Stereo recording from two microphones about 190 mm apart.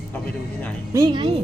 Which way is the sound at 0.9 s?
25° right (ahead or behind).